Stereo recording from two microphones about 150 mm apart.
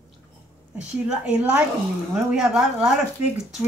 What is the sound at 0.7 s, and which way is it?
A woman's voice, 5° right (ahead or behind).